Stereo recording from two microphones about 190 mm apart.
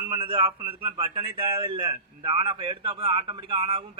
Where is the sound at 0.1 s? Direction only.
30° right (ahead or behind).